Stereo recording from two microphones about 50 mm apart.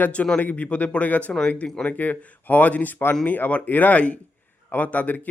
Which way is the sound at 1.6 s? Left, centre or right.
Centre.